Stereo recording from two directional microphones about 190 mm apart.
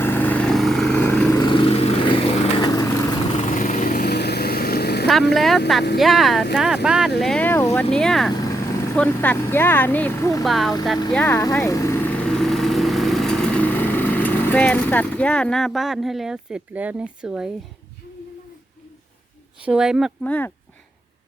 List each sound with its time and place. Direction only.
0.0 s vehicle: 10° left (ahead or behind)
1.4 s vehicle: 25° left (ahead or behind)
3.5 s vehicle: 40° left (ahead or behind)
5.3 s speech: centre (ahead or behind)
7.9 s speech: centre (ahead or behind)
8.3 s vehicle: 20° left (ahead or behind)
9.0 s speech: 10° left (ahead or behind)
10.4 s speech: centre (ahead or behind)
11.1 s vehicle: 10° left (ahead or behind)
19.6 s speech: 5° right (ahead or behind)
20.2 s speech: 5° left (ahead or behind)